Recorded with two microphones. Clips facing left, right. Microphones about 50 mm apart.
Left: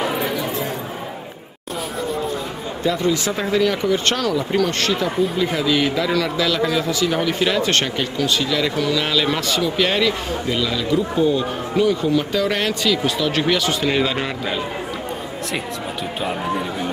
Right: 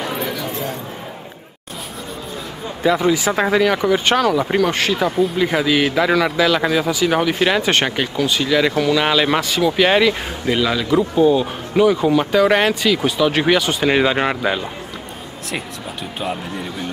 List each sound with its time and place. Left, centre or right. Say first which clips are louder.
0.1 s a sound: left 1 dB; centre
2.8 s a man's voice: right 4 dB; centre
13.8 s a man's voice: right 4 dB; right